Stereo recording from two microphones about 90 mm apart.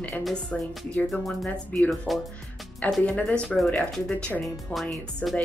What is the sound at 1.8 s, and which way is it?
Speech, centre (ahead or behind).